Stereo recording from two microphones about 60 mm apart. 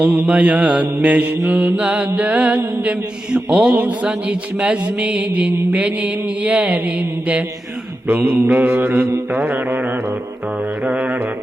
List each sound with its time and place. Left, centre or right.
0.0 s mantra: right
8.0 s mantra: right
10.8 s music: right